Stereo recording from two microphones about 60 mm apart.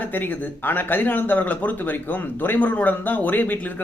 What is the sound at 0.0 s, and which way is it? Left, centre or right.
Speech, left.